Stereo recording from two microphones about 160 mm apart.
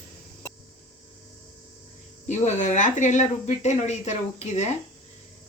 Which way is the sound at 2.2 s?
45° left (ahead or behind).